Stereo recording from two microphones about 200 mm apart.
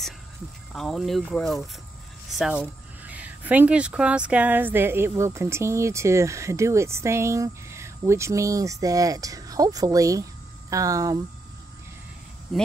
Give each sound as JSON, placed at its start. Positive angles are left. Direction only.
{"t": 0.7, "sound": "speech", "side_deg": 0}